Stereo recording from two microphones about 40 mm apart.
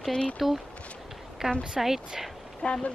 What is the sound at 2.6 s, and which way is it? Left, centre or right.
Speech, left.